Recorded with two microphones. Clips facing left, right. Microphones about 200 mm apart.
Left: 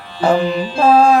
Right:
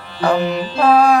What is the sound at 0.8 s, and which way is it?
Music, 25° left (ahead or behind).